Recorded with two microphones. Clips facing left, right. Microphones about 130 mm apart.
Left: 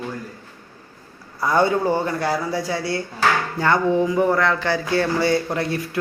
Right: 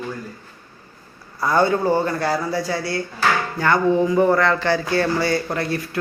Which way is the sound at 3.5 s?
20° left (ahead or behind).